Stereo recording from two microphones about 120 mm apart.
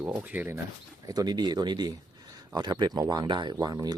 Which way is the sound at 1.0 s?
35° right (ahead or behind).